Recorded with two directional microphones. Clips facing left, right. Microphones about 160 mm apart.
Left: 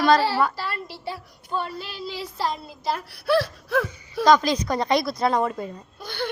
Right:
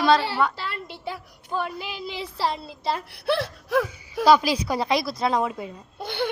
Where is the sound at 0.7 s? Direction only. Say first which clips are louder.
Left 1 dB; 20° right (ahead or behind).